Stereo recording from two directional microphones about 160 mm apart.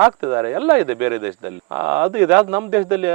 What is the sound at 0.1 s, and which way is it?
A man's voice, 20° right (ahead or behind).